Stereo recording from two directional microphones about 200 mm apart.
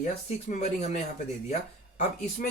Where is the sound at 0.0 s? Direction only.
40° left (ahead or behind).